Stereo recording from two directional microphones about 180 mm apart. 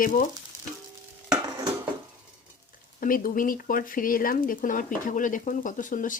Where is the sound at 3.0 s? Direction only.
50° left (ahead or behind).